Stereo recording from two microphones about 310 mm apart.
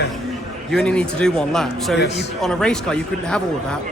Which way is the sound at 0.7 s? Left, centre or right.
Centre.